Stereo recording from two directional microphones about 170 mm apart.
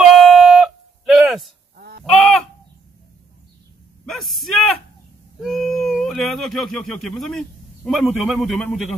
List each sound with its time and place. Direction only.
0.0 s music: centre (ahead or behind)
1.0 s a sound: centre (ahead or behind)
1.8 s goose: 70° right (ahead or behind)
2.0 s goose: centre (ahead or behind)
4.0 s a sound: centre (ahead or behind)
5.4 s speech: centre (ahead or behind)